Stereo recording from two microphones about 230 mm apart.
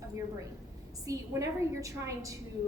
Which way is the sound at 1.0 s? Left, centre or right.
Centre.